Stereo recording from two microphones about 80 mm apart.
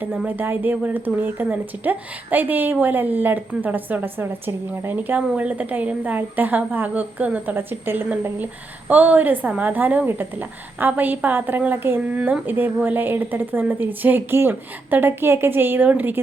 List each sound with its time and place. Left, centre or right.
0.0 s speech: centre